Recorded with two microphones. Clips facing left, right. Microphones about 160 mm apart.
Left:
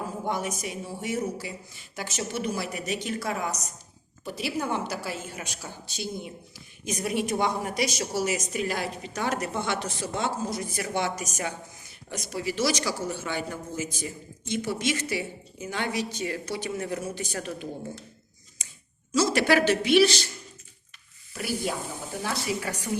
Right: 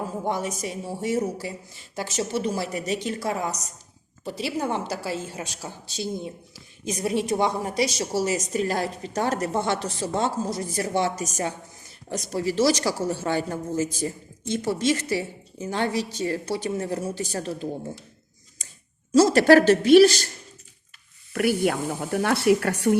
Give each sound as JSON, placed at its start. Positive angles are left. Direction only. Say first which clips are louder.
{"t": 0.3, "sound": "a woman's voice", "louder": "right 2 dB", "side_deg": -30}
{"t": 18.6, "sound": "a sound", "louder": "right 2 dB", "side_deg": -40}
{"t": 19.1, "sound": "a woman's voice", "louder": "right 7 dB", "side_deg": -40}
{"t": 21.3, "sound": "speech", "louder": "right 8 dB", "side_deg": -60}